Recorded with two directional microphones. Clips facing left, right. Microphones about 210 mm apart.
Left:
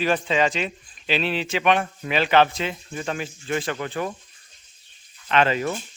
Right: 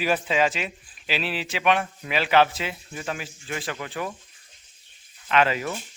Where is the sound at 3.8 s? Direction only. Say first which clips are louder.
Left 4 dB; 45° left (ahead or behind).